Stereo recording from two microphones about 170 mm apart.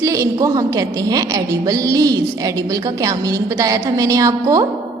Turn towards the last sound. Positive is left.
turn(degrees=-20)  # may be behind; listen again after turning